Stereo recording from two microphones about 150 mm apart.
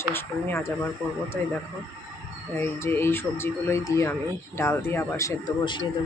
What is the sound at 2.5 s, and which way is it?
Speech, 15° left (ahead or behind).